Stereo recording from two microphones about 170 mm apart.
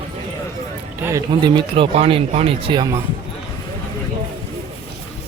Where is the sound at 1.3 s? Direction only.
25° right (ahead or behind).